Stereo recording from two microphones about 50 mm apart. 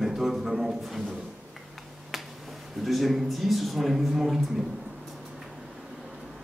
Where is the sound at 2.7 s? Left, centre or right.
Centre.